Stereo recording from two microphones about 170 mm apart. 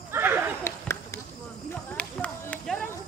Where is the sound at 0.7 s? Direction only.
15° left (ahead or behind).